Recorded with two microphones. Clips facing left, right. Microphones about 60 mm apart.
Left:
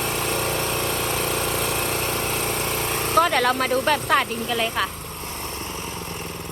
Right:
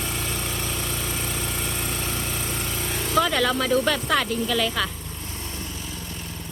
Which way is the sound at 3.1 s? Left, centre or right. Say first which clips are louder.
Left 2 dB; left.